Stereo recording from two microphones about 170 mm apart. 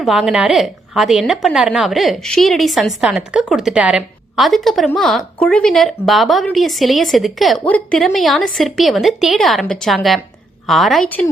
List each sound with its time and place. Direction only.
0.0 s a woman's voice: 5° right (ahead or behind)